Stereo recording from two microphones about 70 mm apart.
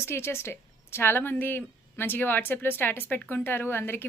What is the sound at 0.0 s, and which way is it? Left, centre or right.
A woman's voice, left.